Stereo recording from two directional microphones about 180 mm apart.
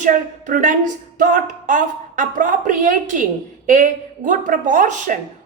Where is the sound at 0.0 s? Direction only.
45° right (ahead or behind).